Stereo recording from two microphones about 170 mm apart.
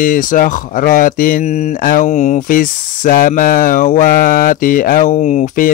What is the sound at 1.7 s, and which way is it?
Mantra, 55° left (ahead or behind).